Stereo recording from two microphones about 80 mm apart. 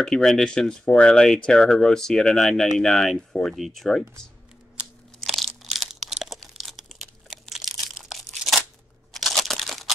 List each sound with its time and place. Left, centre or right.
0.0 s speech: centre
4.7 s crunch: centre
8.0 s crumpling: centre
9.1 s crunch: centre